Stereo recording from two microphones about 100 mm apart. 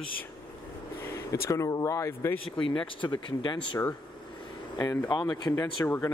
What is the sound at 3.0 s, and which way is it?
Speech, 50° left (ahead or behind).